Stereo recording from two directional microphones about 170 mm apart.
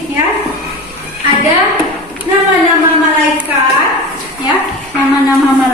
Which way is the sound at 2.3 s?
20° right (ahead or behind).